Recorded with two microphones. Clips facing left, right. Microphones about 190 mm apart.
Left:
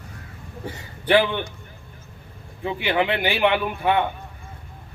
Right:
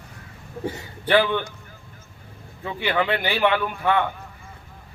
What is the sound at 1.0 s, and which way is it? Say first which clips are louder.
Speech: left 1 dB; 15° left (ahead or behind).